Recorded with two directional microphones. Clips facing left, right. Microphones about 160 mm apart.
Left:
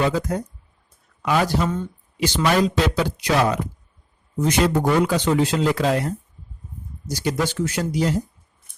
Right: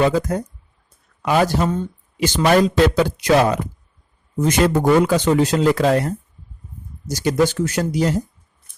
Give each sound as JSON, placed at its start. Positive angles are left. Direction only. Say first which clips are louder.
{"t": 0.0, "sound": "speech", "louder": "right 4 dB", "side_deg": -45}